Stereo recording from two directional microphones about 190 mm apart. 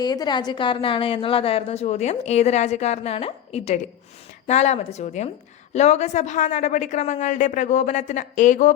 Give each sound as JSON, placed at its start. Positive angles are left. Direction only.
{"t": 0.0, "sound": "a woman's voice", "side_deg": 20}